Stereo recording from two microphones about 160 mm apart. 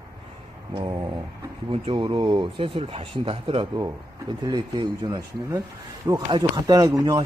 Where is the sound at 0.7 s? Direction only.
25° right (ahead or behind).